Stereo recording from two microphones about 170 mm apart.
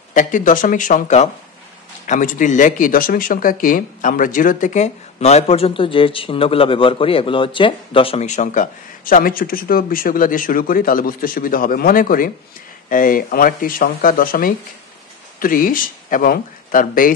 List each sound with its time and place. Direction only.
0.1 s speech: 50° left (ahead or behind)